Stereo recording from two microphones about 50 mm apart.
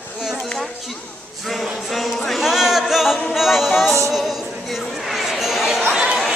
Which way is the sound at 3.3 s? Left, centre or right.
Centre.